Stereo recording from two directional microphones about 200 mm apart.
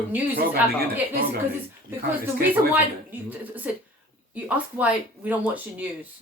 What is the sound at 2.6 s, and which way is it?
A woman's voice, 15° right (ahead or behind).